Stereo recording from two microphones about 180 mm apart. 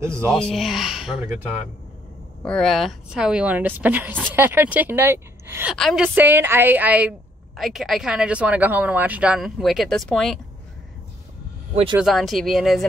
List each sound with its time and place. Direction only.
0.3 s speech: centre (ahead or behind)
2.4 s a woman's voice: 5° left (ahead or behind); by 5.8 s 10° right (ahead or behind)
5.8 s speech: centre (ahead or behind)
6.1 s a woman's voice: 10° right (ahead or behind)
11.7 s speech: 30° right (ahead or behind)
12.0 s speech: centre (ahead or behind)